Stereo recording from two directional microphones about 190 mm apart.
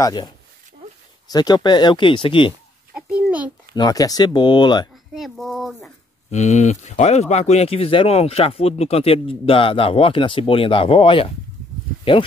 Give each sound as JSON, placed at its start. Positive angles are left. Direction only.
{"t": 0.0, "sound": "speech", "side_deg": 20}
{"t": 1.3, "sound": "speech", "side_deg": 20}
{"t": 2.9, "sound": "a child's voice", "side_deg": -5}
{"t": 3.7, "sound": "speech", "side_deg": 20}
{"t": 5.1, "sound": "speech", "side_deg": 0}
{"t": 6.3, "sound": "speech", "side_deg": 35}